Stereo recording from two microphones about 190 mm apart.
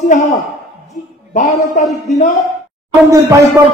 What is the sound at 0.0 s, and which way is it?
A man's voice, 40° left (ahead or behind).